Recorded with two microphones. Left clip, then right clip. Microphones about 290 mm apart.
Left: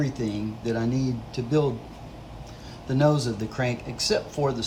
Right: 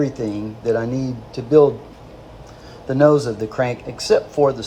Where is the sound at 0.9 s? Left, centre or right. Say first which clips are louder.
Right 3 dB; right.